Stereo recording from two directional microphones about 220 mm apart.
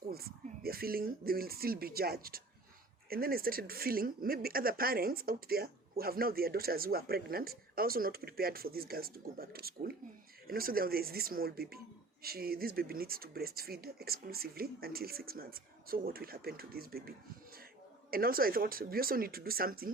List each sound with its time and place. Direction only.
0.1 s speech: 45° right (ahead or behind)